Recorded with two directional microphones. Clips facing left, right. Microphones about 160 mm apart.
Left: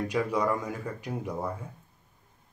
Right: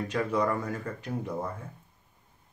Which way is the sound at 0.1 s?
10° left (ahead or behind).